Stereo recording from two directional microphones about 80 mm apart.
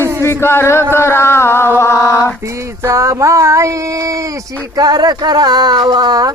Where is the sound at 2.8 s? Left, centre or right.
Right.